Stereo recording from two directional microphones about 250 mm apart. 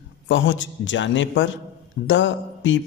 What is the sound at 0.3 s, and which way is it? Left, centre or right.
Speech, left.